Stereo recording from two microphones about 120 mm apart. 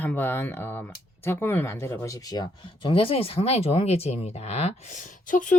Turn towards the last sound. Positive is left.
turn(degrees=90)